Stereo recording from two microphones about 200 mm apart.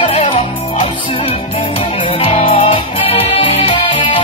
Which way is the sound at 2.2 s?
25° left (ahead or behind).